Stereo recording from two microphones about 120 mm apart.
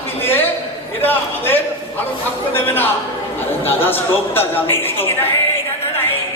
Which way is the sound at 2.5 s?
15° left (ahead or behind).